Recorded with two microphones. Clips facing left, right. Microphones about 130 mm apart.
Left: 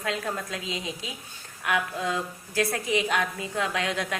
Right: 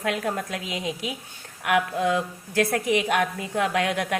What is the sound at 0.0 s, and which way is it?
A woman's voice, 60° right (ahead or behind).